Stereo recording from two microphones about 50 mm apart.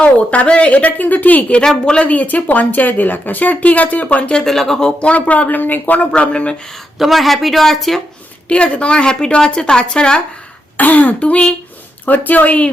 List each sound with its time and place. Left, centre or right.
0.0 s a woman's voice: left
1.6 s speech: centre
2.0 s speech: left
4.4 s speech: centre
4.9 s speech: left
6.1 s a woman's voice: left
7.0 s speech: centre
8.4 s a woman's voice: left
10.8 s a woman's voice: left
12.0 s speech: left